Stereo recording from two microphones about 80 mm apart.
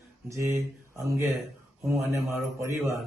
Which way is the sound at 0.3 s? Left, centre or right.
Right.